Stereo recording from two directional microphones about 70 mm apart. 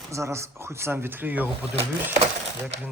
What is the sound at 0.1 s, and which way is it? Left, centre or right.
Speech, right.